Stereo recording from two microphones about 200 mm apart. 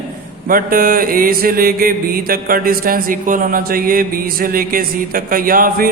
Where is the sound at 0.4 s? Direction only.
45° right (ahead or behind).